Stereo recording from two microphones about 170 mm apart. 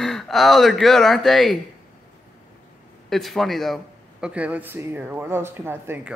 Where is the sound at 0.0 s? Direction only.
Centre (ahead or behind).